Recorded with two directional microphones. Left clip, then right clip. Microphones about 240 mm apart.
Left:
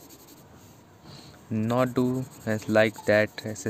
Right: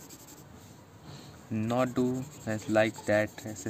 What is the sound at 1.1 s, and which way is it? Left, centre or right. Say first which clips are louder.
Speech: left 4 dB; left.